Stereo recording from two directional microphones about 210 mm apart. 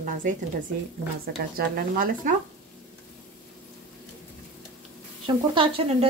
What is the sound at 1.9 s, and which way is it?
Speech, 40° right (ahead or behind).